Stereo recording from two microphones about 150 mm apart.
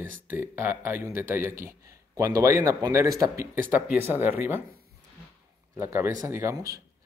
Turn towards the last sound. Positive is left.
turn(degrees=-25)  # may be behind; listen again after turning